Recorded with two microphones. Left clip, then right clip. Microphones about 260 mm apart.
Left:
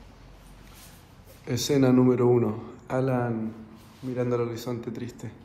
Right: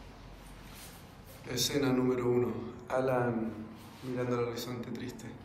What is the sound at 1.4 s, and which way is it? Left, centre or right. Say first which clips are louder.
A man's voice: left 8 dB; left.